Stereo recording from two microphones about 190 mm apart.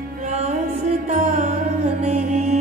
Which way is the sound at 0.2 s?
35° right (ahead or behind).